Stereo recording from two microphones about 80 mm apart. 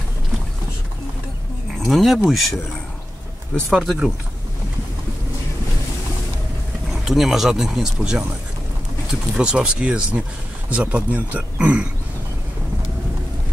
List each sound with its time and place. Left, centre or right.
1.9 s speech: centre
3.7 s speech: centre
6.9 s speech: centre
9.3 s speech: centre